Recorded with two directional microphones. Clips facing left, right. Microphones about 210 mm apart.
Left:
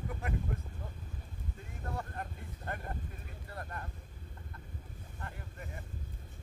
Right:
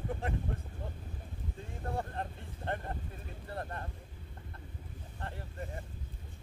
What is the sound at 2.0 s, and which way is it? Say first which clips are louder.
Vehicle: right 3 dB; 30° right (ahead or behind).